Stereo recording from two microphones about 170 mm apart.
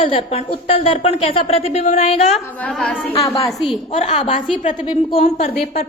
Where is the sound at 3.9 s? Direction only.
40° left (ahead or behind).